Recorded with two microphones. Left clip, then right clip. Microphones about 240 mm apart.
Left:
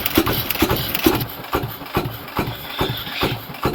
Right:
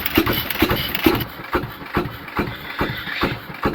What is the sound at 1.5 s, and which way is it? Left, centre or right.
Engine, left.